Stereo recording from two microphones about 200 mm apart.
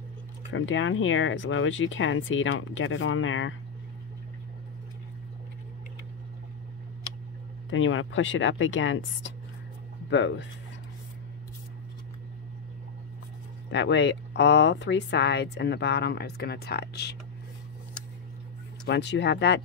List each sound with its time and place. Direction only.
0.5 s speech: 70° left (ahead or behind)
7.7 s speech: 75° left (ahead or behind)
13.7 s speech: 65° left (ahead or behind)
18.9 s speech: 60° left (ahead or behind)